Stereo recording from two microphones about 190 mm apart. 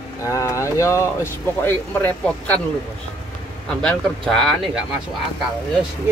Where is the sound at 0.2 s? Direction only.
15° left (ahead or behind).